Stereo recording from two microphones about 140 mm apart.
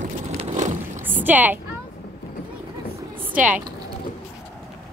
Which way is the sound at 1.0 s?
15° right (ahead or behind).